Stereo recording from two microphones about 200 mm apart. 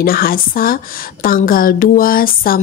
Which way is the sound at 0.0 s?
45° left (ahead or behind).